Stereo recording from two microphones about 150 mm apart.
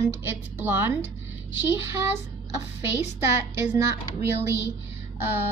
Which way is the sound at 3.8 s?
15° right (ahead or behind).